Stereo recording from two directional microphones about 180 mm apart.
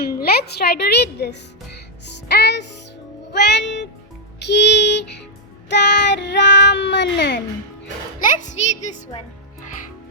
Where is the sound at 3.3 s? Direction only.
70° left (ahead or behind).